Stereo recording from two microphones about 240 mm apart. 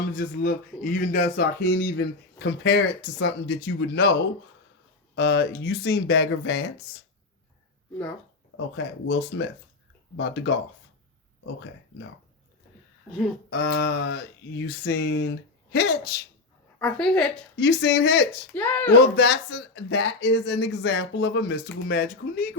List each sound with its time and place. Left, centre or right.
0.1 s speech: left
8.5 s speech: left
13.5 s a sound: left
16.8 s a woman's voice: centre
17.6 s speech: left
18.5 s speech: centre
18.9 s speech: left